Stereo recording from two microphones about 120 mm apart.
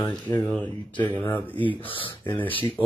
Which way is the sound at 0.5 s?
15° left (ahead or behind).